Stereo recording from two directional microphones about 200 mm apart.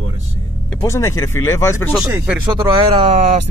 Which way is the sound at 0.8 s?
15° left (ahead or behind).